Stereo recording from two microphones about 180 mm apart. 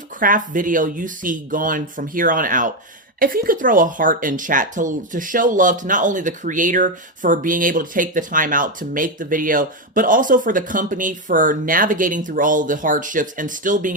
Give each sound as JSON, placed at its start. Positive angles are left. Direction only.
{"t": 0.2, "sound": "speech", "side_deg": -50}